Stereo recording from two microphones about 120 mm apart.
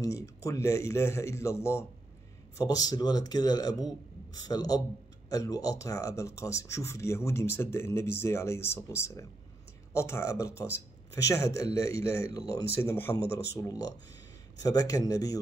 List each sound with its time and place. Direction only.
0.0 s speech: 25° left (ahead or behind)